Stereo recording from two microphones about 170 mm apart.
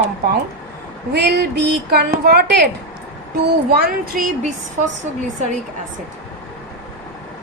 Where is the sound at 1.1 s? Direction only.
70° right (ahead or behind).